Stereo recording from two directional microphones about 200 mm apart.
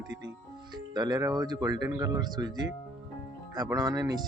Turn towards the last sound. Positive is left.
turn(degrees=-20)  # may be behind; listen again after turning